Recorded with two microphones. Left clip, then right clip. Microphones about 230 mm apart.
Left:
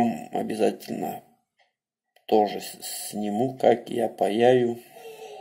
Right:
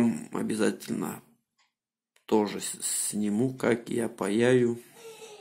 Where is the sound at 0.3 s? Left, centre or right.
Right.